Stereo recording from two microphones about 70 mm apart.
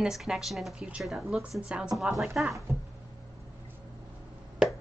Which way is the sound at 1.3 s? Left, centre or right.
Centre.